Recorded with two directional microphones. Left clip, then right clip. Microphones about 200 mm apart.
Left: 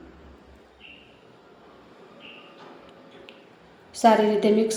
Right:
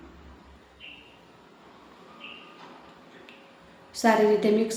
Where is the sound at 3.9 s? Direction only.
10° left (ahead or behind).